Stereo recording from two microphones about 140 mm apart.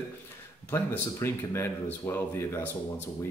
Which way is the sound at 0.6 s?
15° left (ahead or behind).